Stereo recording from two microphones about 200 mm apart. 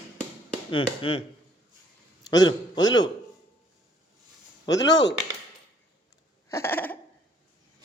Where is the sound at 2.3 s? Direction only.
20° left (ahead or behind).